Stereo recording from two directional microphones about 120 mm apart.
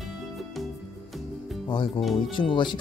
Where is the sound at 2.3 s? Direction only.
40° left (ahead or behind).